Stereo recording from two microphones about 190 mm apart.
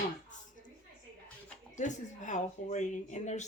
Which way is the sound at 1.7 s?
40° left (ahead or behind).